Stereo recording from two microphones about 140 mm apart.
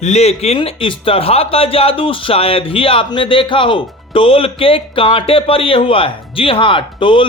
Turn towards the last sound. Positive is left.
turn(degrees=35)  # may be behind; listen again after turning